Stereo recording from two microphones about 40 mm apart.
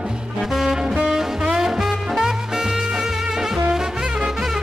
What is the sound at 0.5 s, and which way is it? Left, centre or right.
Music, centre.